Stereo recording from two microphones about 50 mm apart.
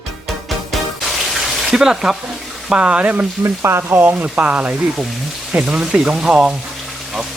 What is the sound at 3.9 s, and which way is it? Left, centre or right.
Speech, right.